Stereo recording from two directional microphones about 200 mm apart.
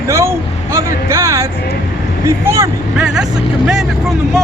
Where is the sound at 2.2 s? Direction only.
15° right (ahead or behind).